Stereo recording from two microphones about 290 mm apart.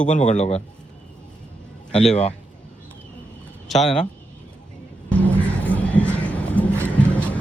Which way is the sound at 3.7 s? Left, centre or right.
Centre.